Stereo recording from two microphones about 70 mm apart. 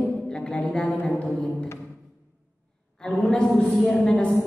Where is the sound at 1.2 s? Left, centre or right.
Centre.